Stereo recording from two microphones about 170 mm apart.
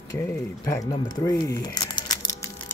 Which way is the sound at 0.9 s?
20° left (ahead or behind).